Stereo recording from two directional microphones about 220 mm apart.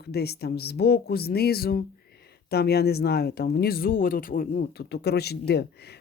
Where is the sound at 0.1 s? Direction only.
45° left (ahead or behind).